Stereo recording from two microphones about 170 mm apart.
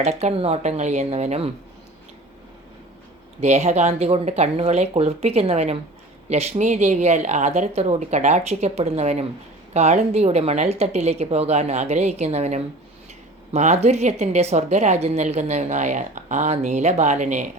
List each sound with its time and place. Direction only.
0.0 s speech: 40° right (ahead or behind)
3.4 s speech: 40° right (ahead or behind)